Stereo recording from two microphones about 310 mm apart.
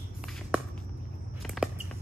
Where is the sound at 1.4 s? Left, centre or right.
Centre.